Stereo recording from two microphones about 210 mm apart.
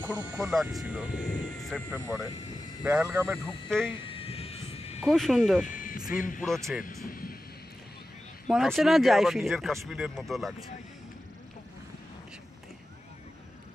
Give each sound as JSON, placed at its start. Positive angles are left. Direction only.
{"t": 0.0, "sound": "speech", "side_deg": -10}
{"t": 3.4, "sound": "speech", "side_deg": 5}
{"t": 4.1, "sound": "a sound", "side_deg": 25}
{"t": 5.0, "sound": "speech", "side_deg": 0}
{"t": 5.7, "sound": "a sound", "side_deg": 40}
{"t": 7.1, "sound": "vehicle", "side_deg": 45}
{"t": 8.5, "sound": "speech", "side_deg": 0}